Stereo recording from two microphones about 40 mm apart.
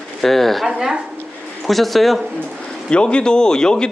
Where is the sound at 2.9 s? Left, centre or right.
Left.